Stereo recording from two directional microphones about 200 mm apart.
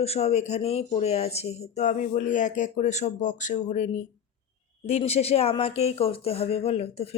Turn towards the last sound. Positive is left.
turn(degrees=30)  # may be behind; listen again after turning